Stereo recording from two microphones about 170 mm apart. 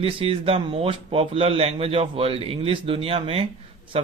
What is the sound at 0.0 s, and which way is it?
A man's voice, 35° right (ahead or behind).